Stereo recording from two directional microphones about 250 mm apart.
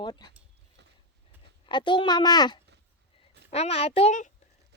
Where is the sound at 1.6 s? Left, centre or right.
Centre.